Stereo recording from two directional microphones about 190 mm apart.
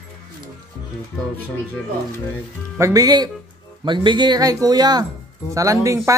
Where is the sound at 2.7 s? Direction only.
15° right (ahead or behind).